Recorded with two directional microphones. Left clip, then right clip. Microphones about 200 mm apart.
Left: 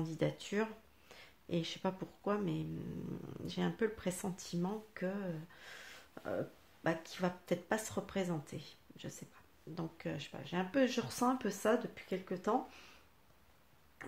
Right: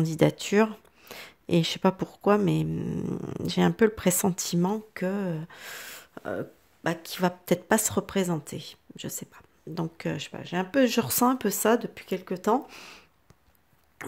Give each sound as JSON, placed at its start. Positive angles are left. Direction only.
{"t": 0.0, "sound": "speech", "side_deg": -55}